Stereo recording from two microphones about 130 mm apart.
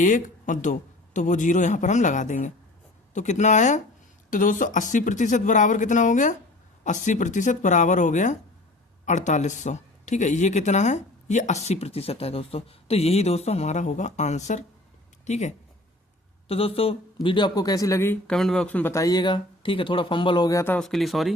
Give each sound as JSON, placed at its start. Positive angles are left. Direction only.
{"t": 0.0, "sound": "speech", "side_deg": 80}
{"t": 4.3, "sound": "speech", "side_deg": 90}
{"t": 16.5, "sound": "a man's voice", "side_deg": 45}
{"t": 18.3, "sound": "speech", "side_deg": 5}
{"t": 20.7, "sound": "speech", "side_deg": 5}